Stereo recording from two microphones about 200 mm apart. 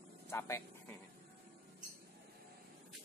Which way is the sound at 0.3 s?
15° left (ahead or behind).